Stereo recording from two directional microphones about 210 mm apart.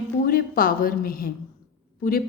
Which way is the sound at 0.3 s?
45° left (ahead or behind).